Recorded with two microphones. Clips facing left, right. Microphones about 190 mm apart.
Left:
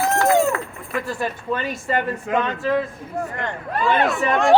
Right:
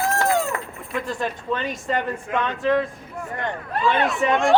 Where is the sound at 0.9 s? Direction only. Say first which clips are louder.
Left 1 dB; 5° left (ahead or behind).